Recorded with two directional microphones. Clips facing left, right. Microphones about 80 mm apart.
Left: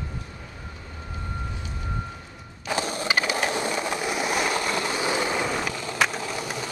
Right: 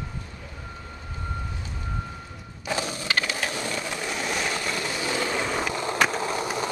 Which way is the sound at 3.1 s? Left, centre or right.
Centre.